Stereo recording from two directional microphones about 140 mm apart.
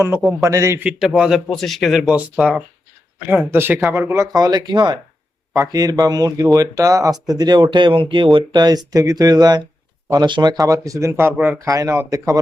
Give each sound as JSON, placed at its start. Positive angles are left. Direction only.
{"t": 0.4, "sound": "speech", "side_deg": -20}
{"t": 0.9, "sound": "speech", "side_deg": -5}